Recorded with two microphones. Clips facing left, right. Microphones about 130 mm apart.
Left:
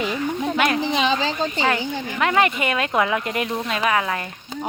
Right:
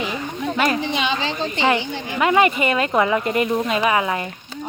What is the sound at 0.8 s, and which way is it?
Speech, 35° left (ahead or behind).